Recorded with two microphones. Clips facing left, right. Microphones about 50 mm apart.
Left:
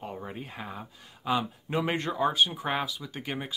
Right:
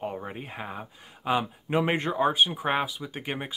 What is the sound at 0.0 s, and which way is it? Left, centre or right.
Speech, right.